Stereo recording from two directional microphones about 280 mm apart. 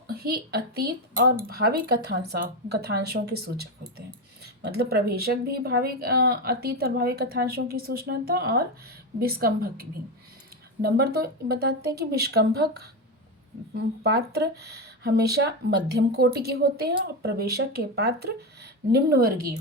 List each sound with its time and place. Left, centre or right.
0.1 s a woman's voice: right
10.8 s a woman's voice: right
14.0 s a woman's voice: right